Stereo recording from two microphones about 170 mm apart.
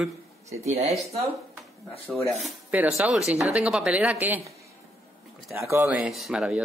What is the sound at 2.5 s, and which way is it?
Speech, 5° right (ahead or behind).